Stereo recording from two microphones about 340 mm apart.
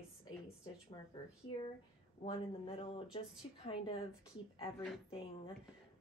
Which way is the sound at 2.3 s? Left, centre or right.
Centre.